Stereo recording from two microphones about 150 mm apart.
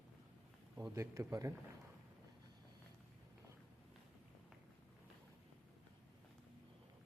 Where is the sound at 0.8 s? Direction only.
20° right (ahead or behind).